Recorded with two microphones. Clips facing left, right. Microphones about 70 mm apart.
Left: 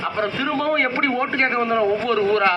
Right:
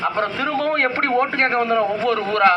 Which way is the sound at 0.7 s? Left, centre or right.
Right.